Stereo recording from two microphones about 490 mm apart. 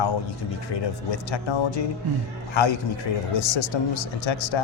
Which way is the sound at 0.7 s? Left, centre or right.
Left.